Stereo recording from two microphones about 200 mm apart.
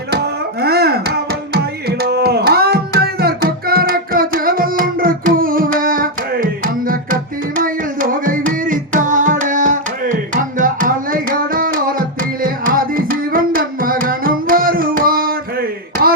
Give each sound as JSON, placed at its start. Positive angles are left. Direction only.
{"t": 0.1, "sound": "music", "side_deg": -55}